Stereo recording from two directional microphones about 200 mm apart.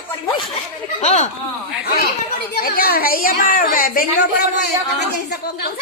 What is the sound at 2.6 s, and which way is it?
A woman's voice, 45° left (ahead or behind).